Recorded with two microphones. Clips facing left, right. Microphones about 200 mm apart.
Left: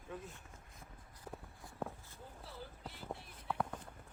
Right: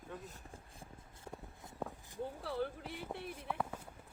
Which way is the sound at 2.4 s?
70° right (ahead or behind).